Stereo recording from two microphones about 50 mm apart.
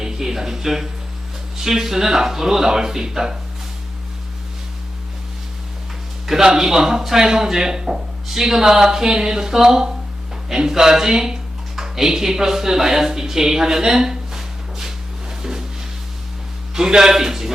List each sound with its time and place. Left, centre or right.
0.0 s speech: centre
6.2 s speech: centre
15.4 s a sound: centre
16.7 s a man's voice: centre